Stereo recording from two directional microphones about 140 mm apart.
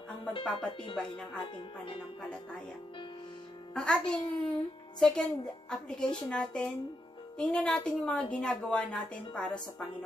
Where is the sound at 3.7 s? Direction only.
5° left (ahead or behind).